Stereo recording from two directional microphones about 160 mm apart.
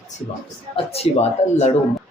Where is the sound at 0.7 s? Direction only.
40° left (ahead or behind).